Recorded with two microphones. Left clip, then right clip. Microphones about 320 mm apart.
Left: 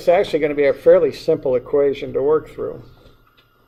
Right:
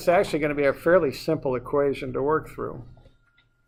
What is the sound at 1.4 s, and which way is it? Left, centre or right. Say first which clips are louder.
Speech: left 6 dB; right.